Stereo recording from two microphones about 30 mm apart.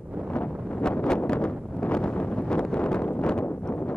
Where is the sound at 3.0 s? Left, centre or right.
Left.